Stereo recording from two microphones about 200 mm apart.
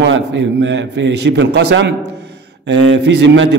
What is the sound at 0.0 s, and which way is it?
A man's voice, 65° right (ahead or behind).